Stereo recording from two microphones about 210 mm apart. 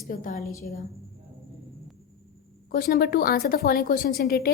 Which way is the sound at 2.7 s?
45° left (ahead or behind).